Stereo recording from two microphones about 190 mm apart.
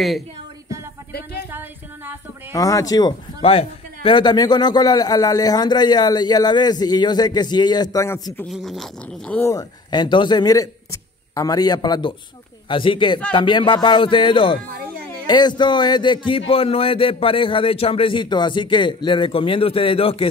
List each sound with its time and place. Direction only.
1.1 s speech: 55° left (ahead or behind)
1.5 s music: 10° right (ahead or behind)
2.5 s speech: 20° left (ahead or behind)
8.5 s speech: centre (ahead or behind); by 20.2 s 30° left (ahead or behind)